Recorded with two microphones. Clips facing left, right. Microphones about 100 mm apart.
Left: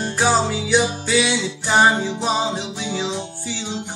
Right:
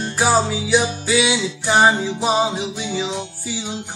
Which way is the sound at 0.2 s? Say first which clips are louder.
Right 1 dB; 5° right (ahead or behind).